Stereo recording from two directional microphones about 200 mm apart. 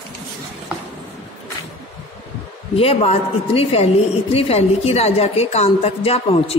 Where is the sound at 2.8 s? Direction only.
30° left (ahead or behind).